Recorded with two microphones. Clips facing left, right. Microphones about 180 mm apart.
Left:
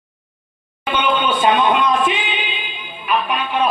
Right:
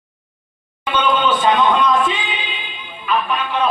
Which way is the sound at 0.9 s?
15° left (ahead or behind).